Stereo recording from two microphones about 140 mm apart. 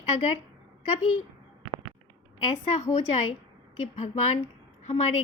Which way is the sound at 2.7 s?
55° left (ahead or behind).